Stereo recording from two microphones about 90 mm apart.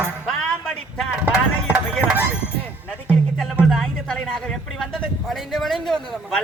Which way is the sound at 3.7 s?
5° left (ahead or behind).